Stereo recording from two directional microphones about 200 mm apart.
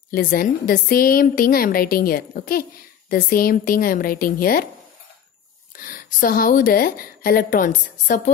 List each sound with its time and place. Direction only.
0.1 s a woman's voice: 45° left (ahead or behind)
5.8 s a woman's voice: 45° left (ahead or behind)